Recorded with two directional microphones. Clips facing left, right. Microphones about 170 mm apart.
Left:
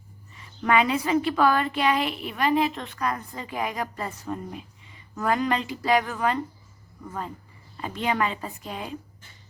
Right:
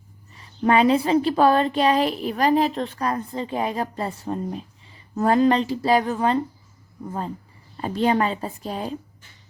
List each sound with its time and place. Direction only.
0.3 s a woman's voice: 35° right (ahead or behind)
7.8 s a woman's voice: 35° right (ahead or behind)